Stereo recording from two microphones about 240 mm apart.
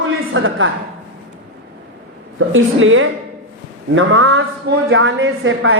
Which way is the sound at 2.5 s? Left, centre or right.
Right.